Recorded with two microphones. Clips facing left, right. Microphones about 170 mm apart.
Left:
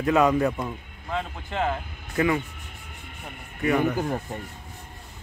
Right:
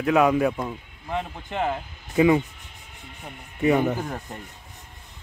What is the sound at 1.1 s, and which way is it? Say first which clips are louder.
A man's voice: right 1 dB; 15° right (ahead or behind).